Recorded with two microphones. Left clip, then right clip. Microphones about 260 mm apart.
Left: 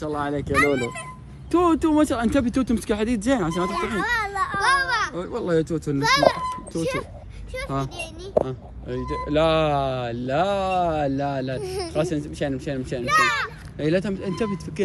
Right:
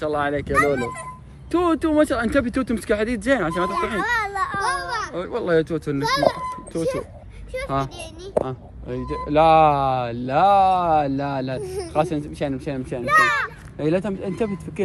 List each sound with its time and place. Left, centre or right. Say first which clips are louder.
0.0 s speech: right 4 dB; centre
0.5 s speech: left 1 dB; centre
1.5 s speech: left 1 dB; left
3.6 s a child's voice: right 2 dB; centre
8.8 s speech: even; centre